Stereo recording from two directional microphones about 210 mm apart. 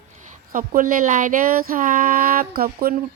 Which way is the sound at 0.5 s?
40° right (ahead or behind).